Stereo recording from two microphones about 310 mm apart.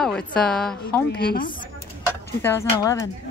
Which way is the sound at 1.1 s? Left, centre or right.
Left.